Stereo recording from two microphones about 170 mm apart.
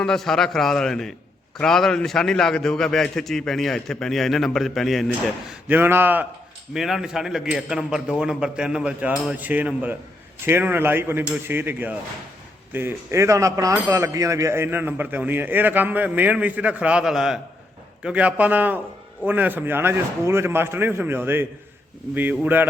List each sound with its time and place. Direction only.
0.0 s a man's voice: 5° left (ahead or behind)
5.6 s a man's voice: 10° right (ahead or behind)